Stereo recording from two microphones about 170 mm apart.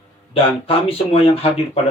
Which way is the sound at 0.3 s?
35° left (ahead or behind).